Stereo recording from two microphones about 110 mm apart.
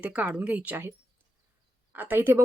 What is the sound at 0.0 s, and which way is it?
Speech, 10° right (ahead or behind).